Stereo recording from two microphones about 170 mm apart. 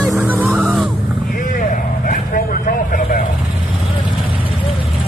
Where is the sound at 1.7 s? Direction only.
55° left (ahead or behind).